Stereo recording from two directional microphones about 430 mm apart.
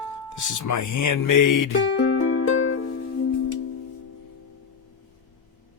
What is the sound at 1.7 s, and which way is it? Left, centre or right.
Music, left.